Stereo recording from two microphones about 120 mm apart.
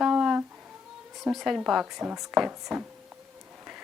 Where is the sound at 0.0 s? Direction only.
5° right (ahead or behind).